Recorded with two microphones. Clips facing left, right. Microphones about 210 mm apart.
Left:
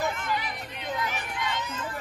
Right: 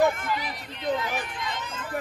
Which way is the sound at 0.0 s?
55° right (ahead or behind).